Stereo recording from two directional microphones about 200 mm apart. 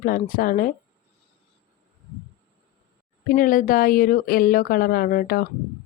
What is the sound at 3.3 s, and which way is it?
A woman's voice, 45° left (ahead or behind).